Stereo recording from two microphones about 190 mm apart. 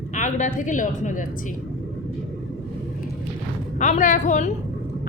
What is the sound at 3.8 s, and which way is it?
Speech, 40° left (ahead or behind).